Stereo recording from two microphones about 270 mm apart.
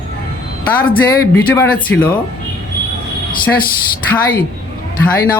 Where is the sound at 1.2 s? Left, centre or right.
Centre.